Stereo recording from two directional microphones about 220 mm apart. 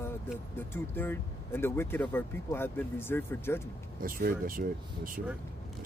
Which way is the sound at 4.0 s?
40° right (ahead or behind).